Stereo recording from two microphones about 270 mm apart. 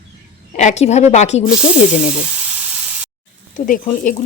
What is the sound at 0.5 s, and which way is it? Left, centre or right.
Speech, left.